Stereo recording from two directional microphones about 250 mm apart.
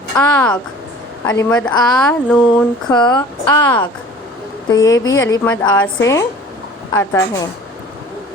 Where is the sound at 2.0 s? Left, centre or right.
Centre.